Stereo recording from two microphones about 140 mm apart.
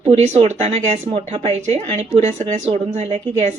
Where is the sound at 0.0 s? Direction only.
50° right (ahead or behind).